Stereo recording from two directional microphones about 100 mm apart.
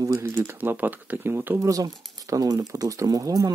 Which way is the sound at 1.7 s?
35° right (ahead or behind).